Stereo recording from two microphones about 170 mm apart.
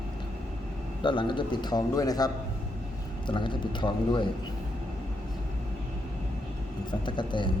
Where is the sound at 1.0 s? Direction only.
30° left (ahead or behind).